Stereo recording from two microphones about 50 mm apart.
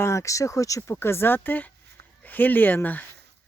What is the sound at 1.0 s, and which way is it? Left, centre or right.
Speech, left.